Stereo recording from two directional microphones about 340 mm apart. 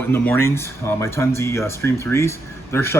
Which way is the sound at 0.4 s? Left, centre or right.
Centre.